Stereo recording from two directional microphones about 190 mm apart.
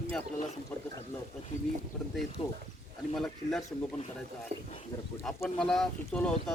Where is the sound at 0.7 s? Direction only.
10° left (ahead or behind).